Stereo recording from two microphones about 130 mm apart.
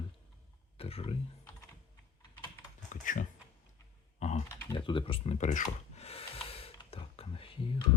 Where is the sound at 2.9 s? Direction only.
85° left.